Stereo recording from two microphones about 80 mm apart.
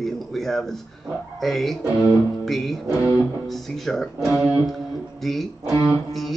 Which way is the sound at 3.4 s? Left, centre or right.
Centre.